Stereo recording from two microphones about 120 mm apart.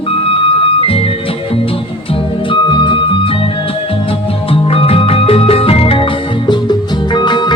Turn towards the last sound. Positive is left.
turn(degrees=40)  # may be behind; listen again after turning